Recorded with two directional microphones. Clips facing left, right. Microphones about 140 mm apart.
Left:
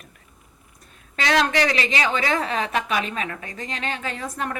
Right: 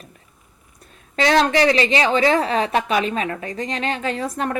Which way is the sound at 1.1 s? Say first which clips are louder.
Right 4 dB; 35° right (ahead or behind).